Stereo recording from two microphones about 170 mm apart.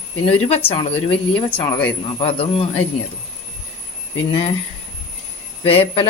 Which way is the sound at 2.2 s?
35° left (ahead or behind).